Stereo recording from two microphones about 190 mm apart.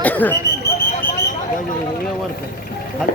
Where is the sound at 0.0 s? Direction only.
10° left (ahead or behind).